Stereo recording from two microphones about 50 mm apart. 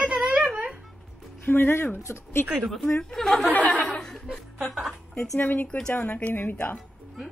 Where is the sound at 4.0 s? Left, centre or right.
Centre.